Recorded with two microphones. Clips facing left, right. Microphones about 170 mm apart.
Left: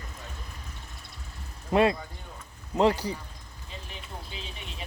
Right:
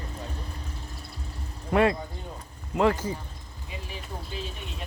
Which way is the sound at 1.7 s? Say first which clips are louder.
Even; 20° left (ahead or behind).